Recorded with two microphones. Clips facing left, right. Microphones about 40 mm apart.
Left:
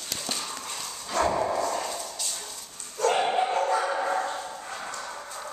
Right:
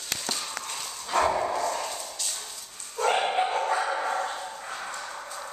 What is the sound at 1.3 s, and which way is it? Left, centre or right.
Dog, centre.